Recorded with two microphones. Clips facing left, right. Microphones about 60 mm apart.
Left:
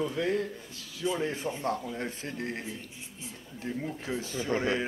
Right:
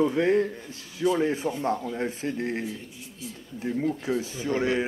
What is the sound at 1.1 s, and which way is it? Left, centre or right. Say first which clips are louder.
Speech: right 6 dB; centre.